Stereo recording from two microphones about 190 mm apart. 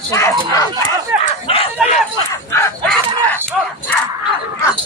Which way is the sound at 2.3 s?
15° left (ahead or behind).